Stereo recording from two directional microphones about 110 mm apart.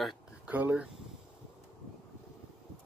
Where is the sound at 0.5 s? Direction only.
15° right (ahead or behind).